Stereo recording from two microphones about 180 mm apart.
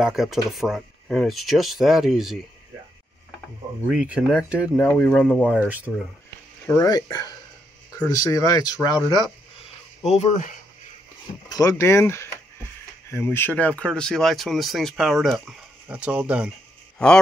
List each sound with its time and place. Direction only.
0.0 s speech: centre (ahead or behind)
3.9 s speech: 5° right (ahead or behind)
4.7 s speech: 10° left (ahead or behind)
6.6 s speech: 15° left (ahead or behind)
10.0 s speech: 40° left (ahead or behind)
11.4 s speech: 20° left (ahead or behind); by 16.5 s 5° right (ahead or behind)